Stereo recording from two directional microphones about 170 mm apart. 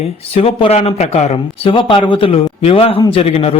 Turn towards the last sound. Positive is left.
turn(degrees=35)  # may be behind; listen again after turning